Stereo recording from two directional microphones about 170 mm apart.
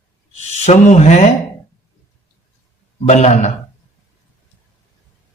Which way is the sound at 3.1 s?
40° left (ahead or behind).